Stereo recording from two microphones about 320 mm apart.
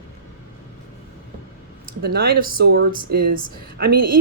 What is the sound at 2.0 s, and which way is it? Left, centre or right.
Speech, right.